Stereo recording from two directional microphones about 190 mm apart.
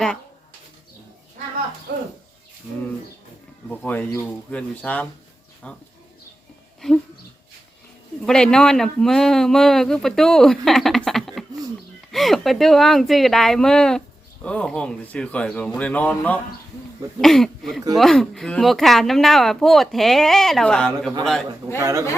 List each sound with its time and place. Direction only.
1.9 s speech: 60° right (ahead or behind)
2.7 s speech: 5° right (ahead or behind)
3.7 s speech: 10° left (ahead or behind)
8.2 s speech: 5° left (ahead or behind)
21.8 s speech: 15° right (ahead or behind)